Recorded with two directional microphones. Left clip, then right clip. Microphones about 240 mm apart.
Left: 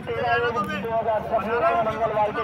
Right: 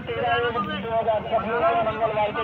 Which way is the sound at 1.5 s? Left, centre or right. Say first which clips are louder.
Even; left.